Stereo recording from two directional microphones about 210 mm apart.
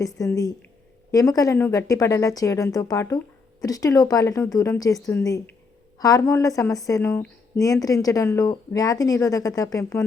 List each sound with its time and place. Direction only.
0.2 s a woman's voice: 15° left (ahead or behind)